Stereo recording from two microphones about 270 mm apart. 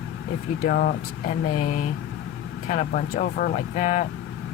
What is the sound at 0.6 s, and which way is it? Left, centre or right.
Speech, left.